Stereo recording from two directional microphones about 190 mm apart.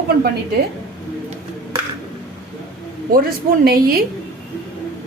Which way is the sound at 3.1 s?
50° right (ahead or behind).